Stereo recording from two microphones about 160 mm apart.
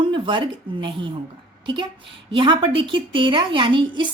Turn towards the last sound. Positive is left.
turn(degrees=-30)  # may be behind; listen again after turning